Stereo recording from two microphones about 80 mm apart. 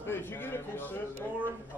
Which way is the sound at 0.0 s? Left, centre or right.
Left.